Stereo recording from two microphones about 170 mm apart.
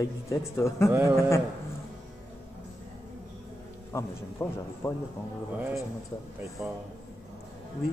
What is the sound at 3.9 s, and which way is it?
A man's voice, 15° left (ahead or behind).